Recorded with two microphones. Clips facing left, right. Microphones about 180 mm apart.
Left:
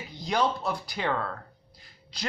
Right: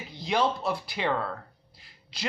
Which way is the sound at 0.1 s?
5° right (ahead or behind).